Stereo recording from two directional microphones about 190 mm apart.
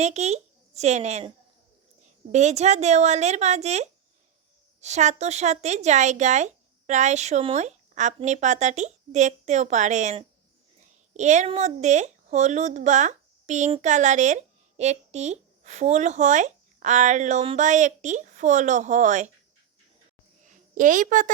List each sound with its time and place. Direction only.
0.0 s speech: 35° right (ahead or behind)
2.3 s a woman's voice: 35° right (ahead or behind)
20.5 s a woman's voice: 45° right (ahead or behind)